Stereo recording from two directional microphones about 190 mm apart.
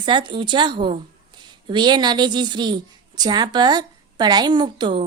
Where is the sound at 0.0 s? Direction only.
25° right (ahead or behind).